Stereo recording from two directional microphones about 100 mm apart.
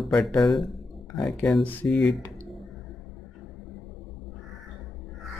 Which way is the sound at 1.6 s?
15° left (ahead or behind).